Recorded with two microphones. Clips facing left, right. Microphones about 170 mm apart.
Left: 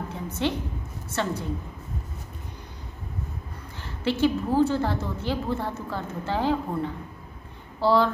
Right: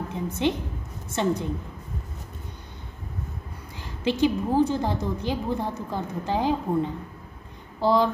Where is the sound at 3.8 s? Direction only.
15° right (ahead or behind).